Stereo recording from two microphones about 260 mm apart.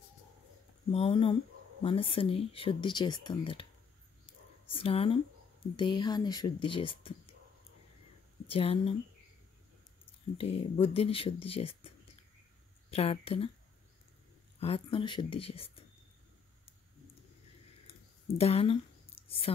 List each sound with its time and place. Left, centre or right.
0.9 s speech: left
4.6 s speech: left
8.5 s speech: left
10.3 s speech: left
12.9 s speech: left
14.6 s speech: left
18.4 s speech: left
19.2 s a sound: left